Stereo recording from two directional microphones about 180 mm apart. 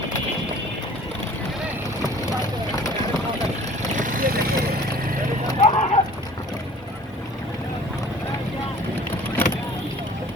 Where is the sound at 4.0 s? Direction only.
50° right (ahead or behind).